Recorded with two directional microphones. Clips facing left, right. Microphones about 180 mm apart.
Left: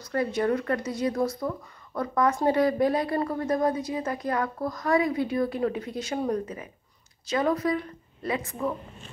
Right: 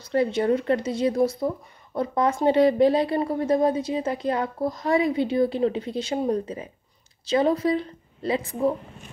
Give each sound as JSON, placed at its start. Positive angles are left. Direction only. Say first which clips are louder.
{"t": 0.0, "sound": "a woman's voice", "louder": "right 4 dB", "side_deg": -25}